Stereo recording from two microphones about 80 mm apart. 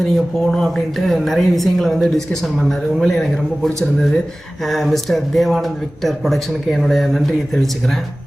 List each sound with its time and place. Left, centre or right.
0.0 s speech: centre